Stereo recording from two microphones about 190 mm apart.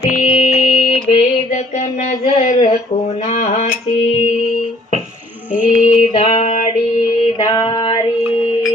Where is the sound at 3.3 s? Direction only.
40° left (ahead or behind).